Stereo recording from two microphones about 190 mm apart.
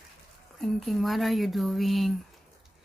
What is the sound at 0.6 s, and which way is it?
Speech, centre (ahead or behind).